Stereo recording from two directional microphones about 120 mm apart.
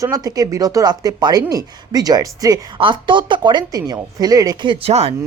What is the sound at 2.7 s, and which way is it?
A woman's voice, 45° right (ahead or behind).